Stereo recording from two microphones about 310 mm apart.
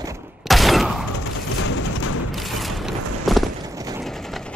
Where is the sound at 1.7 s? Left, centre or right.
Left.